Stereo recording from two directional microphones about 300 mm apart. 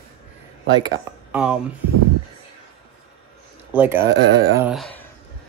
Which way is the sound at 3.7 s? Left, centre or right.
Centre.